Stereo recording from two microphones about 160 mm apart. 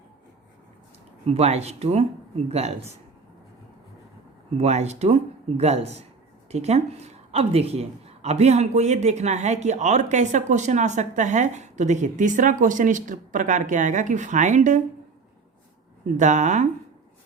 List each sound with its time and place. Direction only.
1.2 s speech: 40° right (ahead or behind)
4.5 s speech: 45° right (ahead or behind)
16.0 s speech: 50° right (ahead or behind)